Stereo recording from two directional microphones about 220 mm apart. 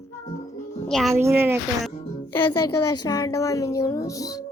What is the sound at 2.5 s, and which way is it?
Speech, 90° left.